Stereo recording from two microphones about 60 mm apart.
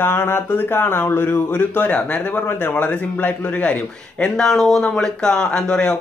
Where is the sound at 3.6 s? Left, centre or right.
Centre.